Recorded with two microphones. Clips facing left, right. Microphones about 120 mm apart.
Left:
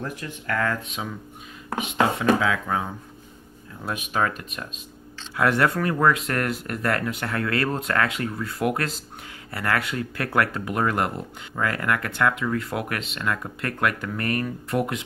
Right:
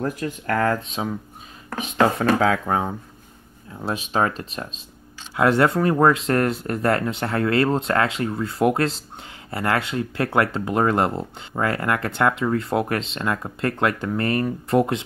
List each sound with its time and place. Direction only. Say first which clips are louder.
0.0 s speech: right 7 dB; 40° right (ahead or behind)